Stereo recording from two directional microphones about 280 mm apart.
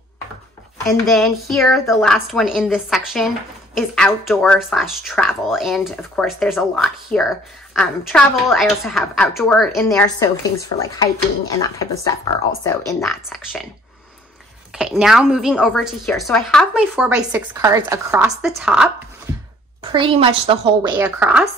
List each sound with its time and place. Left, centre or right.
0.8 s speech: centre
10.0 s speech: centre
13.0 s speech: centre
14.8 s speech: centre
19.8 s a woman's voice: centre
21.0 s speech: centre